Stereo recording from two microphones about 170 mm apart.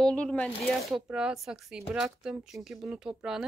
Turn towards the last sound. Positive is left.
turn(degrees=-5)  # may be behind; listen again after turning